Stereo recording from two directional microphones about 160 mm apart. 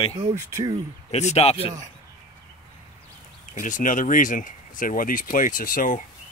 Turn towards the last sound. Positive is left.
turn(degrees=60)  # may be behind; listen again after turning